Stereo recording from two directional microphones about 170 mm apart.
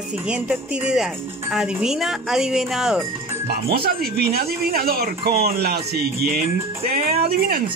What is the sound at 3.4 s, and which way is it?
Speech, 65° right (ahead or behind).